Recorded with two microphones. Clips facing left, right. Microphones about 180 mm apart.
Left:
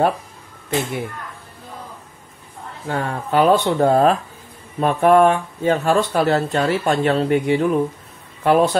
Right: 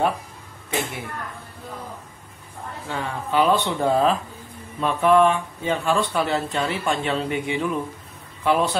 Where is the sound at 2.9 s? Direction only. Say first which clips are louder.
Left 5 dB; 45° left (ahead or behind).